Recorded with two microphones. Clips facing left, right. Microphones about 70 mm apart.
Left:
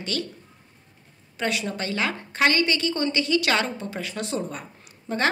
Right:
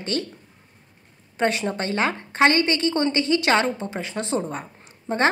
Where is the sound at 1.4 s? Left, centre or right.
Right.